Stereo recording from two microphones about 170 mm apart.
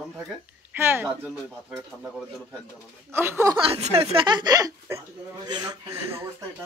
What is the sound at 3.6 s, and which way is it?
Speech, 35° right (ahead or behind).